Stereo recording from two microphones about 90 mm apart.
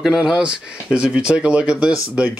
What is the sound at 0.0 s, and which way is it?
Speech, 5° right (ahead or behind).